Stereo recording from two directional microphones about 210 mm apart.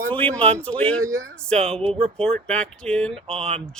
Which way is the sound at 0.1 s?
5° left (ahead or behind).